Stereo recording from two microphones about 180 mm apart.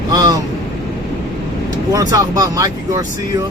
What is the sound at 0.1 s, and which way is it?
Vehicle, 20° right (ahead or behind).